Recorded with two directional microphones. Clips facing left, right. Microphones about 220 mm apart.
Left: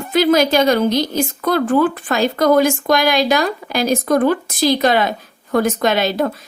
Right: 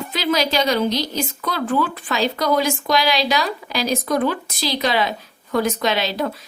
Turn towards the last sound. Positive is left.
turn(degrees=50)  # may be behind; listen again after turning